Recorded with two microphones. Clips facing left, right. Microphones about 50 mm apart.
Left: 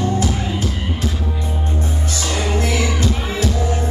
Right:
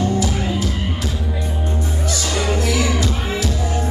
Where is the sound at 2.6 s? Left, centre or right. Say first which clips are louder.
Even; left.